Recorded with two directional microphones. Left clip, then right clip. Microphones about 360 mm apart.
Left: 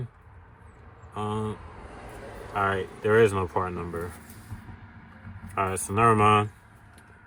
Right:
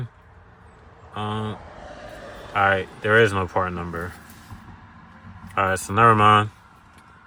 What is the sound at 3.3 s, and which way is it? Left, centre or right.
Speech, right.